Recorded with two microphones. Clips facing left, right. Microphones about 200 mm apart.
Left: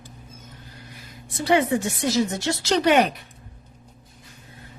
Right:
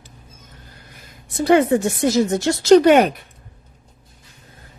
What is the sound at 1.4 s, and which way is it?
A woman's voice, 50° right (ahead or behind).